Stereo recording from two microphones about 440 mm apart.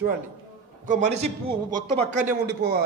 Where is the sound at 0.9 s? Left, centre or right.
Centre.